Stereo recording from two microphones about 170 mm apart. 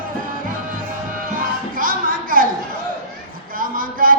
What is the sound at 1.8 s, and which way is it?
Music, 55° right (ahead or behind).